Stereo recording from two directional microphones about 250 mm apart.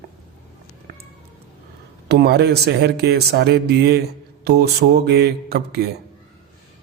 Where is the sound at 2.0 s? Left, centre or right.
Right.